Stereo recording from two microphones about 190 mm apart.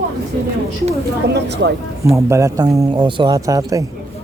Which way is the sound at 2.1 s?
15° right (ahead or behind).